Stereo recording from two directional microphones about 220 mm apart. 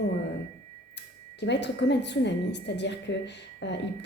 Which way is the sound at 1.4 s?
50° left (ahead or behind).